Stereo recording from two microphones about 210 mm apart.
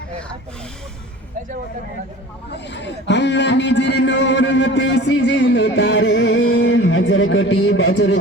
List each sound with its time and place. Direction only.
2.5 s a man's voice: 55° left (ahead or behind)
6.4 s a man's voice: 70° left (ahead or behind)